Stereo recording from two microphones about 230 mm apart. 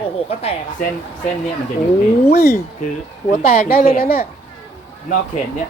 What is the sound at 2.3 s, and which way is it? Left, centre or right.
A woman's voice, left.